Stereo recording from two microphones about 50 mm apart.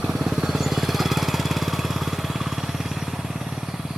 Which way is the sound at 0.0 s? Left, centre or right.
Centre.